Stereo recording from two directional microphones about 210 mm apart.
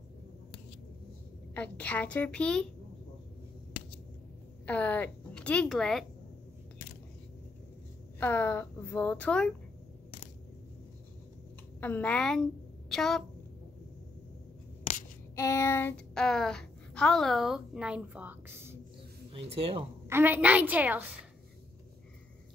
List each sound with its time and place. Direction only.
1.5 s a woman's voice: 5° left (ahead or behind)
4.6 s speech: 5° left (ahead or behind)
8.2 s a woman's voice: 10° left (ahead or behind)
11.8 s a woman's voice: 10° left (ahead or behind)
15.3 s a child's voice: 15° left (ahead or behind); by 18.8 s 10° right (ahead or behind)
19.3 s speech: 30° right (ahead or behind)
20.1 s a woman's voice: 10° right (ahead or behind)